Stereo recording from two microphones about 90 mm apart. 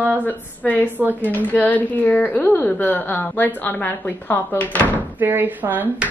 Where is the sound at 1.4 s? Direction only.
20° left (ahead or behind).